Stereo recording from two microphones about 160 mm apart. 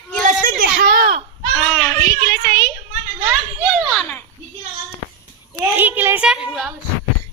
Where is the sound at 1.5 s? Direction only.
20° left (ahead or behind).